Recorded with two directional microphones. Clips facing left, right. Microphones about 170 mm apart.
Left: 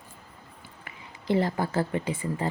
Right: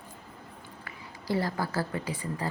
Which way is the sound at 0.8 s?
20° left (ahead or behind).